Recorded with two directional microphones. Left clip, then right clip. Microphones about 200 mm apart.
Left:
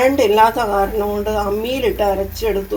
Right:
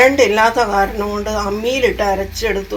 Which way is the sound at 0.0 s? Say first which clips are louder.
Right 1 dB; centre (ahead or behind).